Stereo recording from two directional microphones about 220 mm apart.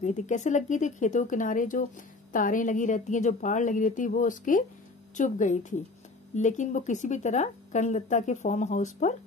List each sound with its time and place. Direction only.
0.0 s speech: 35° left (ahead or behind)